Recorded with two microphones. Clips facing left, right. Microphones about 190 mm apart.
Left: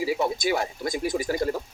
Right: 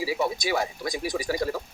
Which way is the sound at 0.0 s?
50° left (ahead or behind).